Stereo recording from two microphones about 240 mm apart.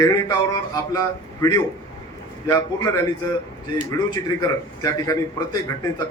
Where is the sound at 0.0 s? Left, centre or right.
Centre.